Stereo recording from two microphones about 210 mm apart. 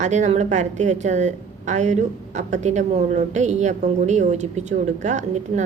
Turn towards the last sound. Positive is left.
turn(degrees=-35)  # may be behind; listen again after turning